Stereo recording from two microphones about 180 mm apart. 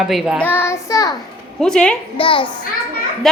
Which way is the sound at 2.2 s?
30° left (ahead or behind).